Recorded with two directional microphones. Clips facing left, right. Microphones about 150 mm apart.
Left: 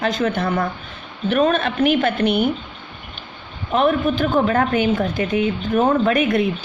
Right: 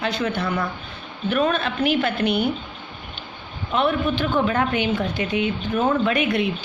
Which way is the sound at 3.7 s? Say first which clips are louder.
Left 4 dB; 40° left (ahead or behind).